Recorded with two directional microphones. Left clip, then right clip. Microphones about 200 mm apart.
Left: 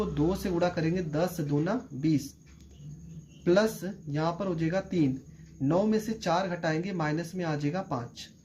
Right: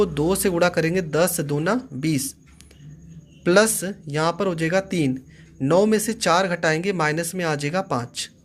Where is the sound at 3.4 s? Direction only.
40° right (ahead or behind).